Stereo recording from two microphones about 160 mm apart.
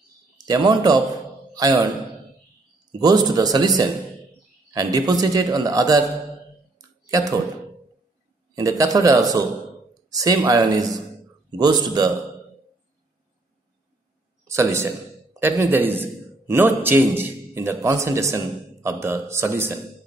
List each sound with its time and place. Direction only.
0.5 s a man's voice: 25° right (ahead or behind)
3.0 s a man's voice: 25° right (ahead or behind)
7.1 s speech: 20° right (ahead or behind)
8.5 s a man's voice: 20° right (ahead or behind)
14.5 s a man's voice: 15° right (ahead or behind)